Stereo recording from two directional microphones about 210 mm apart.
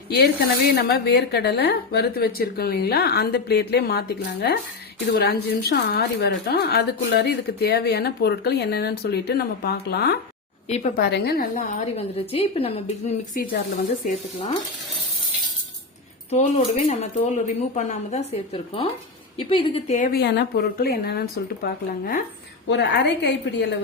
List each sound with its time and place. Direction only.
0.1 s a woman's voice: 50° left (ahead or behind); by 13.1 s 30° left (ahead or behind)
13.4 s speech: 45° left (ahead or behind)
16.3 s speech: 35° left (ahead or behind)
22.7 s a woman's voice: 55° left (ahead or behind)